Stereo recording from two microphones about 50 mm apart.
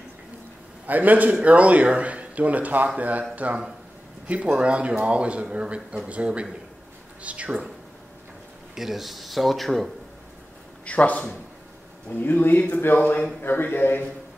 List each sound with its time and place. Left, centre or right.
0.8 s a man's voice: right
8.7 s speech: centre
10.9 s a man's voice: left
12.1 s a man's voice: left